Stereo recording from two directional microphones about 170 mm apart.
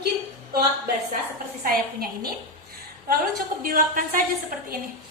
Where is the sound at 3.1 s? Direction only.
55° right (ahead or behind).